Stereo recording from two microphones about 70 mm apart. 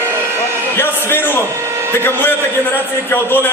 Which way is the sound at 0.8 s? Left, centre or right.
Left.